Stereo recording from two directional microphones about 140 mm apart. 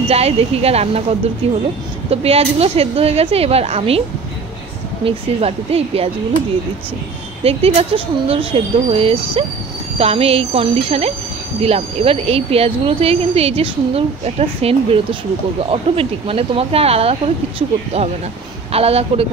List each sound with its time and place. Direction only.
0.1 s speech: 45° right (ahead or behind)
5.0 s speech: 45° right (ahead or behind)
7.4 s speech: 45° right (ahead or behind)